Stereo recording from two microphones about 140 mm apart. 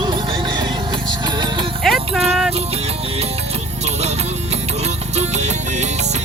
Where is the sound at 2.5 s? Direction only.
45° right (ahead or behind).